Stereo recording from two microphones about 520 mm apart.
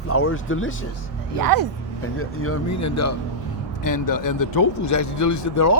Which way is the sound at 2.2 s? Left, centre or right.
Left.